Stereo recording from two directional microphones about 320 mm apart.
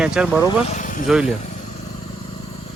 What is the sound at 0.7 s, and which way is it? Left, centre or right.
Speech, left.